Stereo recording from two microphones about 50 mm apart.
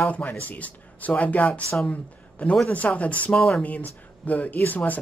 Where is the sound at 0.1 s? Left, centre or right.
Left.